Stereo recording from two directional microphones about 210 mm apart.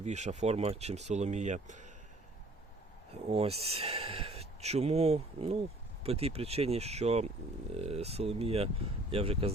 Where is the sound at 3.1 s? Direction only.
30° right (ahead or behind).